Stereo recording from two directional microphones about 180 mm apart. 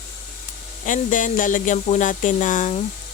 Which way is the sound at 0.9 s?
45° left (ahead or behind).